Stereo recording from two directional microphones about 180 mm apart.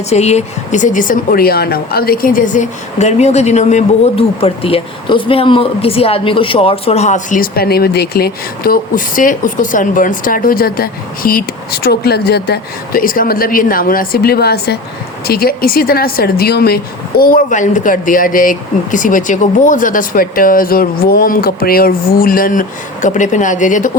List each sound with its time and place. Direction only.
0.1 s a woman's voice: 40° left (ahead or behind)